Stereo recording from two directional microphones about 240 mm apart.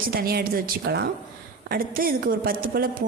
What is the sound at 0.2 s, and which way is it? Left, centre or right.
A woman's voice, right.